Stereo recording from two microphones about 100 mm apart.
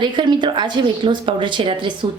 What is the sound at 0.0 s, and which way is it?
Speech, 50° right (ahead or behind).